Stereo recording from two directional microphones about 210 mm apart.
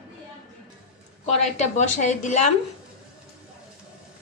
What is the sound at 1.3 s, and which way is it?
A woman's voice, 35° left (ahead or behind).